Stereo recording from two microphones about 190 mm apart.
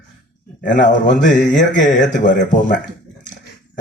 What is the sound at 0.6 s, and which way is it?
A man's voice, 45° left (ahead or behind).